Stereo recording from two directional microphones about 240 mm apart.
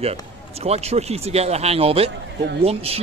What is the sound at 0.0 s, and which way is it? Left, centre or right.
Speech, right.